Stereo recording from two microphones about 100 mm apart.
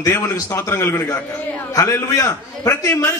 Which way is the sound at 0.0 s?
30° left (ahead or behind).